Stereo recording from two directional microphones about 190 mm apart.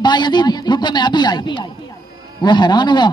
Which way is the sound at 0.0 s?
25° left (ahead or behind).